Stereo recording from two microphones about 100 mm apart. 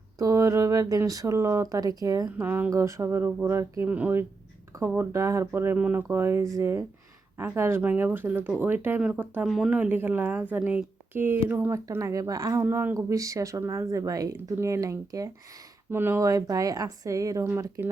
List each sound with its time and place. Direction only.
0.2 s speech: 35° right (ahead or behind)
1.7 s speech: 35° right (ahead or behind)
2.4 s a woman's voice: 20° right (ahead or behind)
9.5 s a woman's voice: 10° right (ahead or behind)
11.7 s speech: 30° right (ahead or behind)
12.6 s a woman's voice: 25° right (ahead or behind)
15.9 s speech: 20° right (ahead or behind)